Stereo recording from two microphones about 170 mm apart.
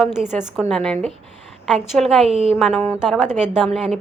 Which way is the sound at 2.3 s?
35° right (ahead or behind).